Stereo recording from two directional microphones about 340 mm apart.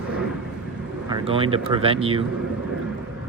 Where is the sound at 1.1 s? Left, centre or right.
Centre.